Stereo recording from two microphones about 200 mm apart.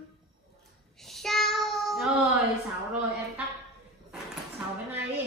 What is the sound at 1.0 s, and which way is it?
Child singing, centre (ahead or behind).